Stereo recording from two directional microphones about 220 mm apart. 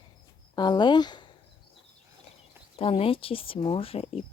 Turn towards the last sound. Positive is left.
turn(degrees=25)  # may be behind; listen again after turning